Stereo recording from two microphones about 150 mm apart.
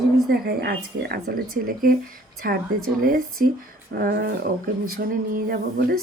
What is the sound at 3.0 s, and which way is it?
Speech, 70° right (ahead or behind).